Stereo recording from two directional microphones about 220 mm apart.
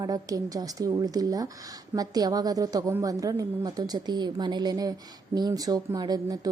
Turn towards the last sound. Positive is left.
turn(degrees=-15)  # may be behind; listen again after turning